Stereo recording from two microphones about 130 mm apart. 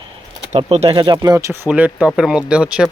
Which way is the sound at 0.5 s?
55° right (ahead or behind).